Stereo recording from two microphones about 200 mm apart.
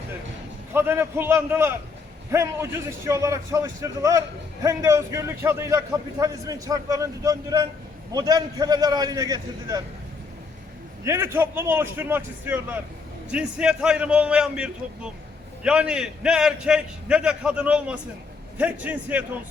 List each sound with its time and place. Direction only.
0.7 s a man's voice: 10° right (ahead or behind)
11.0 s a man's voice: 15° right (ahead or behind)